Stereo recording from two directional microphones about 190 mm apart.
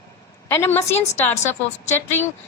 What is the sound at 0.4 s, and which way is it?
Speech, 15° left (ahead or behind).